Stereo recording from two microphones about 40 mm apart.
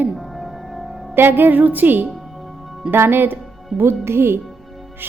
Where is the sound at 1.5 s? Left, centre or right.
Right.